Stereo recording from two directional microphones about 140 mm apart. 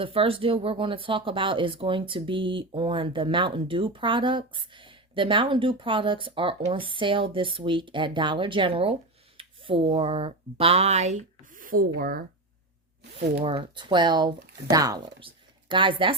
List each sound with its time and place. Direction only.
0.0 s speech: 40° right (ahead or behind)
11.5 s speech: 85° right
13.1 s speech: 40° right (ahead or behind)